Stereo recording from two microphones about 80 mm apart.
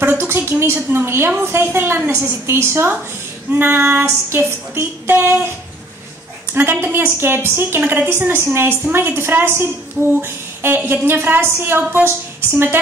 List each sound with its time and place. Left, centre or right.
0.0 s a sound: right
0.7 s music: right
2.0 s a woman's voice: right
3.5 s music: right
6.5 s music: right
10.2 s a sound: right
10.9 s music: right